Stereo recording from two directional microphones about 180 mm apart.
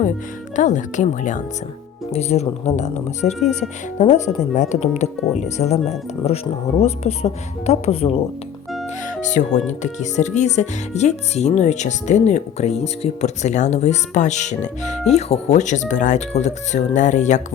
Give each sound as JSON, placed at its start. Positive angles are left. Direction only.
{"t": 0.5, "sound": "speech", "side_deg": 45}